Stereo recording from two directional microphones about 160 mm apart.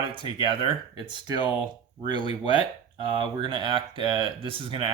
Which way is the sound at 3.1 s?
30° right (ahead or behind).